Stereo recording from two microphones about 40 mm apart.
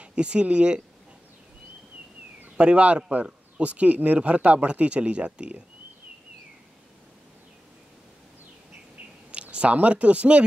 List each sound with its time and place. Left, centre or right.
0.0 s speech: right
2.5 s speech: right
9.3 s speech: right